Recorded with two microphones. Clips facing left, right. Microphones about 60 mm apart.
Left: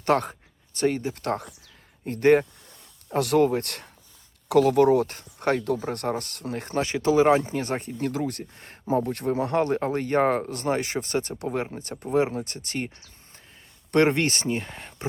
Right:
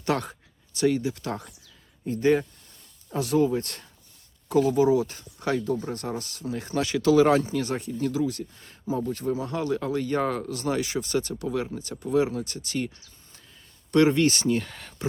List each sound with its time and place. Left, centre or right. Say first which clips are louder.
0.0 s speech: left 4 dB; left
6.8 s speech: even; left
13.9 s speech: right 1 dB; left